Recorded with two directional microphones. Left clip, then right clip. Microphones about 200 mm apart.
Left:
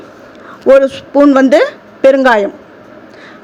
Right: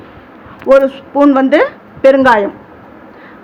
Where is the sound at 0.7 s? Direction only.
25° left (ahead or behind).